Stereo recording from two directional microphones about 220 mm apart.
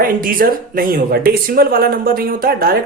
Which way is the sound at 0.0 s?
40° right (ahead or behind).